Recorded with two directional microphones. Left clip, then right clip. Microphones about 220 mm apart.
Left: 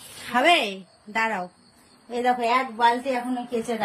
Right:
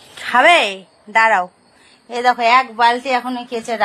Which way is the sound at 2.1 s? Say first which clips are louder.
Right 7 dB; 30° right (ahead or behind).